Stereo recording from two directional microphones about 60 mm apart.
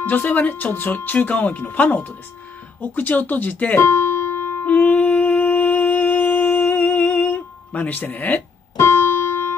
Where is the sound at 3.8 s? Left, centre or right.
Left.